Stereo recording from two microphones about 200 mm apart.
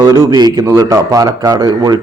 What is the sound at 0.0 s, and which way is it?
A man's voice, 20° right (ahead or behind).